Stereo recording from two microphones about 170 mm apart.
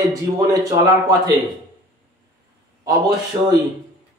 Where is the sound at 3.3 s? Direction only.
30° right (ahead or behind).